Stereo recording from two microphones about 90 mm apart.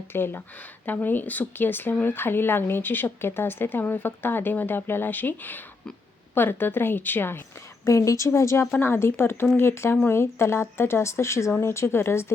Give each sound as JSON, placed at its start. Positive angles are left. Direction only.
{"t": 0.1, "sound": "speech", "side_deg": 25}
{"t": 7.9, "sound": "speech", "side_deg": 35}